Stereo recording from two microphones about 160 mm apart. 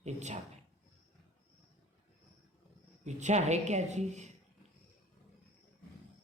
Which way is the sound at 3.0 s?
45° right (ahead or behind).